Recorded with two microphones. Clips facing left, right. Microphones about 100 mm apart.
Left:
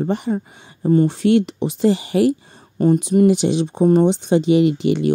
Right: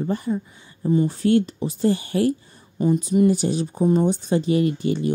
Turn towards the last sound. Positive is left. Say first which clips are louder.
# left 5 dB
turn(degrees=80)